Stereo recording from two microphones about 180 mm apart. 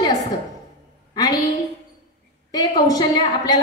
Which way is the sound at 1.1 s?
20° left (ahead or behind).